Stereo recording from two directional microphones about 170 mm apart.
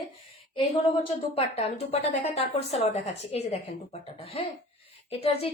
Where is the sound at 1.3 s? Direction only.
35° left (ahead or behind).